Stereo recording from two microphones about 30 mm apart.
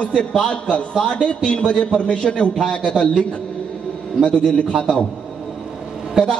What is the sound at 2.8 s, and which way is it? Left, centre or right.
Speech, centre.